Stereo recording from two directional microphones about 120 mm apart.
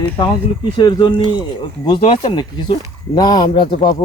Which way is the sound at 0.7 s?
40° left (ahead or behind).